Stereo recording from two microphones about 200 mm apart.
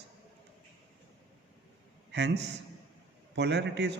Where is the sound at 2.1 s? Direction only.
60° right (ahead or behind).